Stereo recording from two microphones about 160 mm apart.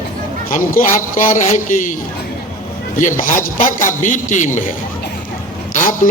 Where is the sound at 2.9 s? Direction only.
55° left (ahead or behind).